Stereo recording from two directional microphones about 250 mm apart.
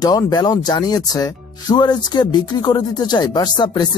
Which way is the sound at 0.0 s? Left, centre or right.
Centre.